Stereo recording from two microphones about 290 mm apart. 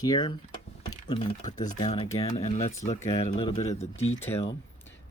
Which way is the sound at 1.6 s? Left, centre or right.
Left.